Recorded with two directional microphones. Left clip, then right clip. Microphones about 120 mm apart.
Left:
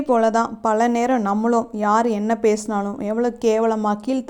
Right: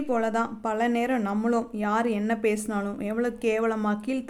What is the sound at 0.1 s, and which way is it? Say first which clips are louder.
A woman's voice: left 9 dB; 40° left (ahead or behind).